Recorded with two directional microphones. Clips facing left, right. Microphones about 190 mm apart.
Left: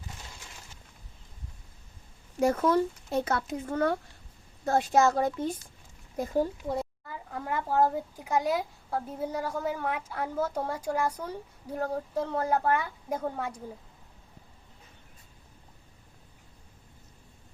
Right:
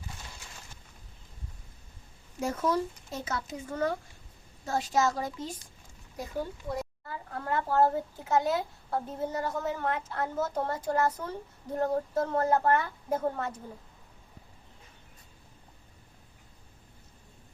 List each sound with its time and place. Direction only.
2.4 s speech: 60° left (ahead or behind)
6.1 s speech: 40° left (ahead or behind)
7.1 s a child's voice: 10° left (ahead or behind)